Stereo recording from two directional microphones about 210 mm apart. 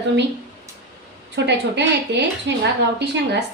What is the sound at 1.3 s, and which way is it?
A woman's voice, 55° right (ahead or behind).